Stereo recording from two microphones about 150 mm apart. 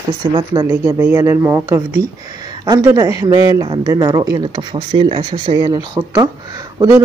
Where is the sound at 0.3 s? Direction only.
30° right (ahead or behind).